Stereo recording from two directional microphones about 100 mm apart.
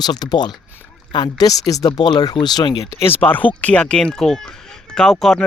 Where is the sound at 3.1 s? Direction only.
20° left (ahead or behind).